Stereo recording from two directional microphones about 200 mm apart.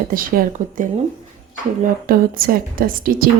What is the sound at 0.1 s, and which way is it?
A woman's voice, 45° right (ahead or behind).